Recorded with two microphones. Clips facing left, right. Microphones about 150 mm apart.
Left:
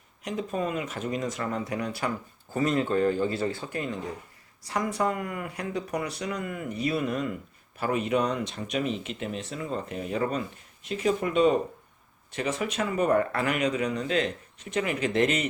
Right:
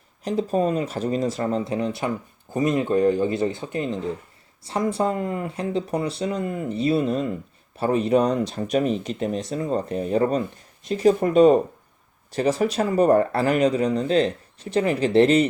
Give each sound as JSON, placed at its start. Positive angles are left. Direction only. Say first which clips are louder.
{"t": 0.3, "sound": "speech", "louder": "right 8 dB", "side_deg": -35}